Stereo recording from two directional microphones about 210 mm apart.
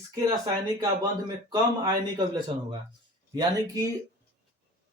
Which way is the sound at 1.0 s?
15° right (ahead or behind).